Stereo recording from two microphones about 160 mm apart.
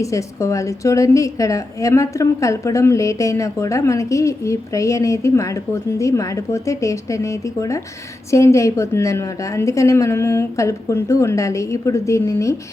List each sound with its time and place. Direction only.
0.0 s a woman's voice: 20° left (ahead or behind)